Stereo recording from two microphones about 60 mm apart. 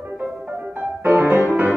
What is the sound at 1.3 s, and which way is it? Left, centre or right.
Music, right.